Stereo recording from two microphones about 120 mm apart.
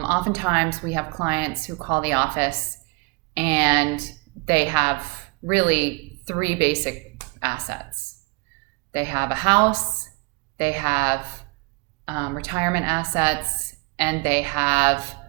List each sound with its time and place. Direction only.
0.1 s a woman's voice: 25° right (ahead or behind)
8.9 s a woman's voice: 20° right (ahead or behind)
10.6 s a woman's voice: 20° right (ahead or behind)